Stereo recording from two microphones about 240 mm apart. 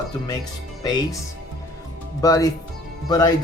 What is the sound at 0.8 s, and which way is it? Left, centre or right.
Speech, centre.